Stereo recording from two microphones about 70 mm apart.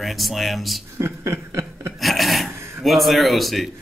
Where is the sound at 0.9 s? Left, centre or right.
Right.